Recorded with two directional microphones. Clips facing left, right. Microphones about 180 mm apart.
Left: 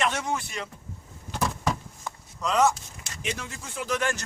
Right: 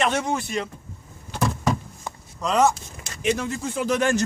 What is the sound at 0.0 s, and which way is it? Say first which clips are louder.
Speech: right 5 dB; 25° right (ahead or behind).